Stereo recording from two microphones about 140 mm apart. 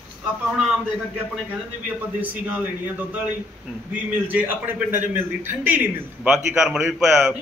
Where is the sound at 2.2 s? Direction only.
10° right (ahead or behind).